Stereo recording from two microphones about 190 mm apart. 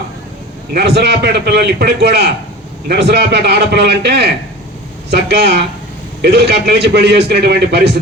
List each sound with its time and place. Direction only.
0.7 s a man's voice: 60° right (ahead or behind)